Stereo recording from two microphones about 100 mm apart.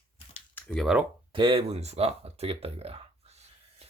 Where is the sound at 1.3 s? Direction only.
65° right (ahead or behind).